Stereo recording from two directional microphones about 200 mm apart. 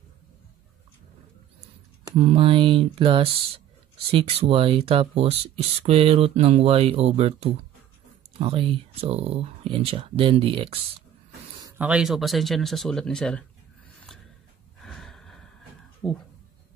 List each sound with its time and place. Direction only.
2.0 s speech: 25° right (ahead or behind)
11.8 s speech: 5° right (ahead or behind)
14.8 s a sound: centre (ahead or behind)
16.0 s speech: centre (ahead or behind)